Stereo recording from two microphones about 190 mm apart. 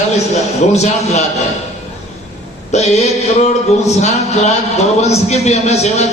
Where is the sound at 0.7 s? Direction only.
35° left (ahead or behind).